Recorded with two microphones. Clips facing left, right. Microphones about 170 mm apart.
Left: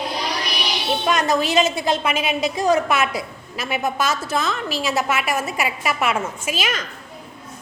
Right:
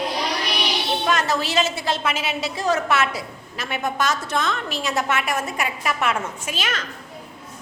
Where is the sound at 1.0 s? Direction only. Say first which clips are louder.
Left 4 dB; 15° left (ahead or behind).